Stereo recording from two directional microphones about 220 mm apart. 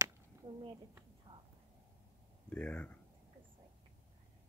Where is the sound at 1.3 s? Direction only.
20° right (ahead or behind).